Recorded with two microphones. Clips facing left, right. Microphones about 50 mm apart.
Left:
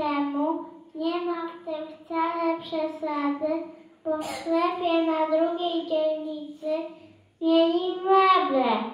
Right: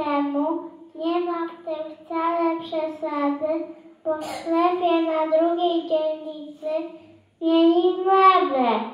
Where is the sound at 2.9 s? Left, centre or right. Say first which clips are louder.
Right 3 dB; centre.